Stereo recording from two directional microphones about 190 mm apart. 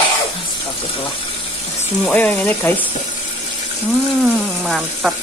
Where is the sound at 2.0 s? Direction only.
5° left (ahead or behind).